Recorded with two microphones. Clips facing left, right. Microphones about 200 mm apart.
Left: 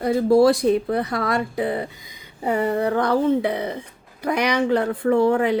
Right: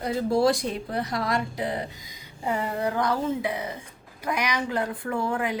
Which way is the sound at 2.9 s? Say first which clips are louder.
Left 8 dB; 60° left (ahead or behind).